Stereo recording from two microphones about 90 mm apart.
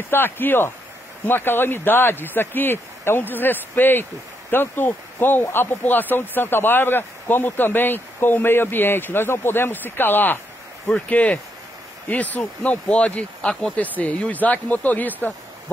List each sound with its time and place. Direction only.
0.1 s speech: 25° left (ahead or behind)